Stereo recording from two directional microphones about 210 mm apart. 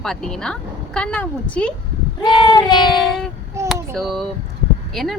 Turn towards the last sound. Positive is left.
turn(degrees=0)  # may be behind; listen again after turning